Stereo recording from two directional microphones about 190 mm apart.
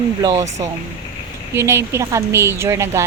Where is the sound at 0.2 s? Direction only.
15° right (ahead or behind).